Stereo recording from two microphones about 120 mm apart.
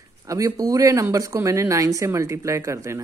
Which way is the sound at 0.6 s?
30° right (ahead or behind).